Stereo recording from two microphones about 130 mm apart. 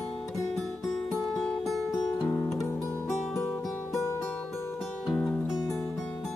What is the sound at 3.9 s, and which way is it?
Music, 20° left (ahead or behind).